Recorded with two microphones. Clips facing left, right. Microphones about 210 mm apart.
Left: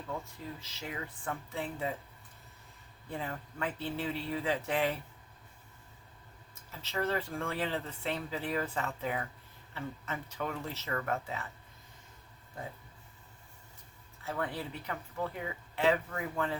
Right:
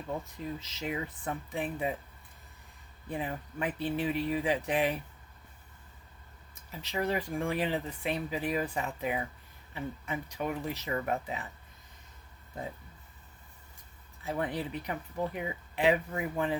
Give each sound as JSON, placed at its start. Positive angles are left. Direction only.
{"t": 0.6, "sound": "speech", "side_deg": -20}
{"t": 3.1, "sound": "speech", "side_deg": -15}
{"t": 6.5, "sound": "speech", "side_deg": -15}
{"t": 14.3, "sound": "speech", "side_deg": -20}